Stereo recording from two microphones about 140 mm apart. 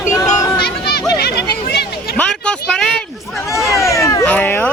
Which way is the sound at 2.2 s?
5° left (ahead or behind).